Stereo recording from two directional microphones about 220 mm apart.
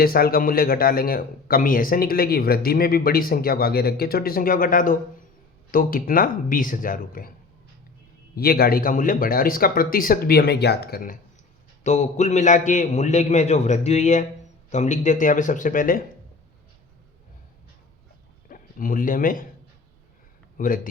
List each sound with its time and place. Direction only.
0.0 s a man's voice: 45° left (ahead or behind)
8.4 s speech: 45° left (ahead or behind)
18.4 s speech: 40° left (ahead or behind)
20.6 s a man's voice: 40° left (ahead or behind)